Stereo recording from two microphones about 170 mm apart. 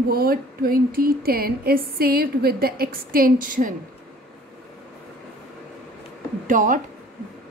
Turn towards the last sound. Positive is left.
turn(degrees=-50)  # may be behind; listen again after turning